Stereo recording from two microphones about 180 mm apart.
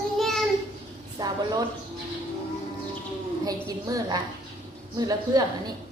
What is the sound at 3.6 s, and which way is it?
A woman's voice, 20° right (ahead or behind).